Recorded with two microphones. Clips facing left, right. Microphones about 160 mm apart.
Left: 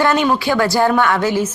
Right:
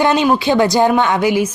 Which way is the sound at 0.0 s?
20° right (ahead or behind).